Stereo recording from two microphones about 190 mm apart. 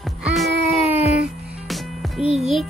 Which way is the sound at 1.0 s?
35° left (ahead or behind).